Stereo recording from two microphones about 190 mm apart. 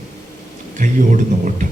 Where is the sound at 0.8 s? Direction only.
45° right (ahead or behind).